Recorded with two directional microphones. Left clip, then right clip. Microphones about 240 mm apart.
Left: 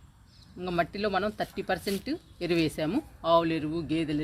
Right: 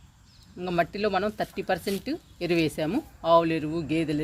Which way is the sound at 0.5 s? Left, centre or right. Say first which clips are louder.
Right 3 dB; right.